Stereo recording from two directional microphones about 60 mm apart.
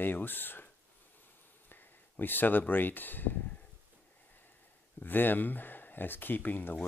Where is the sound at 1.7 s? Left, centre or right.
Left.